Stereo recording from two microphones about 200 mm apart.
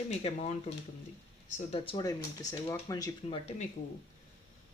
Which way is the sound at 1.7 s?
25° left (ahead or behind).